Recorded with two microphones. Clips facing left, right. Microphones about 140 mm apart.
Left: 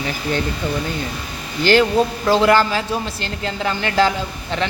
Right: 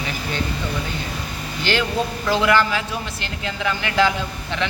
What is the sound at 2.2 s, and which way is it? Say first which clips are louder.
A woman's voice: left 2 dB; 35° left (ahead or behind).